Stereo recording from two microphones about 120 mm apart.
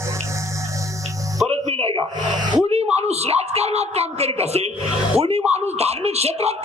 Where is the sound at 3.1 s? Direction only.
60° right (ahead or behind).